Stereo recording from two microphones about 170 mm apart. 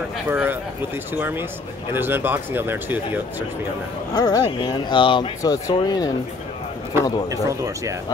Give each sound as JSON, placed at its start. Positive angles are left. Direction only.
{"t": 0.3, "sound": "speech", "side_deg": -10}
{"t": 2.0, "sound": "speech", "side_deg": -10}
{"t": 4.1, "sound": "speech", "side_deg": 20}
{"t": 7.2, "sound": "speech", "side_deg": -20}